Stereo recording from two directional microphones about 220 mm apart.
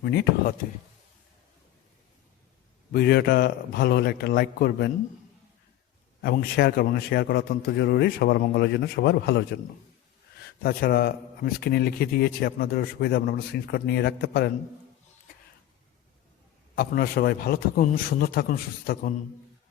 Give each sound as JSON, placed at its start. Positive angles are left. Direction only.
{"t": 0.0, "sound": "a man's voice", "side_deg": 50}
{"t": 2.9, "sound": "a man's voice", "side_deg": 45}
{"t": 6.2, "sound": "a man's voice", "side_deg": 45}
{"t": 10.6, "sound": "a man's voice", "side_deg": 45}
{"t": 16.7, "sound": "a man's voice", "side_deg": 45}